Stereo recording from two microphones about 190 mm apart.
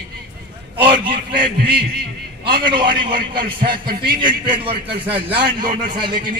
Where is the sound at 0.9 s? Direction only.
50° right (ahead or behind).